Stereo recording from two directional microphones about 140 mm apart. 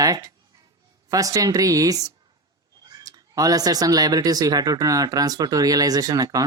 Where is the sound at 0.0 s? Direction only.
25° right (ahead or behind).